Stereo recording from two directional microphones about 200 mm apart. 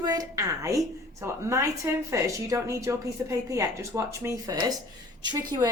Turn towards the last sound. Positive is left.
turn(degrees=-20)  # may be behind; listen again after turning